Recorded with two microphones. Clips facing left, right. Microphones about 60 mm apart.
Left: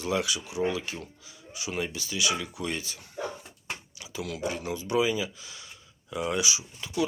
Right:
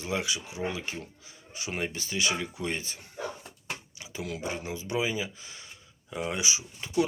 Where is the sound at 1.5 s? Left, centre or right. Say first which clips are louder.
Left 1 dB; right.